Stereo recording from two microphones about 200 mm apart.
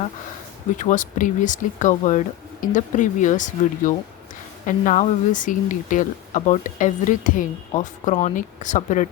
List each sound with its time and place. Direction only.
0.7 s speech: 40° left (ahead or behind)